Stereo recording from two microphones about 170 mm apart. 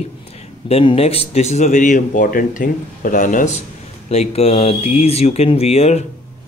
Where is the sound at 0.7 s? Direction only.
35° left (ahead or behind); by 3.5 s 50° left (ahead or behind).